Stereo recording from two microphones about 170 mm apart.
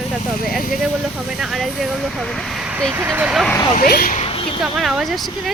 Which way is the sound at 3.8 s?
65° left (ahead or behind).